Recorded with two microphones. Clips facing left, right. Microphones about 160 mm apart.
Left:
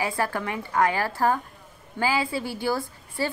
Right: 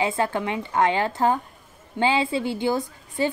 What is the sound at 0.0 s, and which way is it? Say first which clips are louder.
A woman's voice: right 3 dB; 20° right (ahead or behind).